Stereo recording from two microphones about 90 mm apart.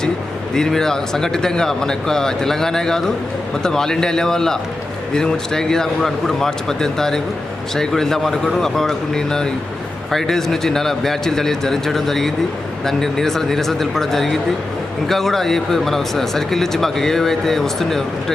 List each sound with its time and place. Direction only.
0.5 s speech: 5° left (ahead or behind)